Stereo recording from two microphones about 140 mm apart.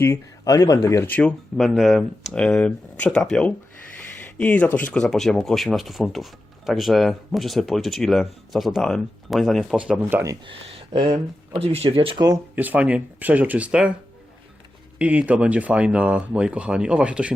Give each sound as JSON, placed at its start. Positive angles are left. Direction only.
{"t": 0.0, "sound": "speech", "side_deg": 20}
{"t": 1.5, "sound": "speech", "side_deg": 0}
{"t": 10.4, "sound": "speech", "side_deg": -40}
{"t": 12.5, "sound": "speech", "side_deg": -10}
{"t": 14.9, "sound": "speech", "side_deg": -10}